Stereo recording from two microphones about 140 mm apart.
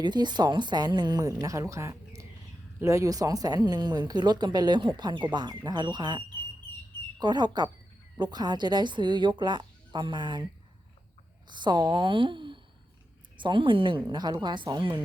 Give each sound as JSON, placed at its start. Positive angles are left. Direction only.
{"t": 0.0, "sound": "speech", "side_deg": -30}
{"t": 11.4, "sound": "speech", "side_deg": -30}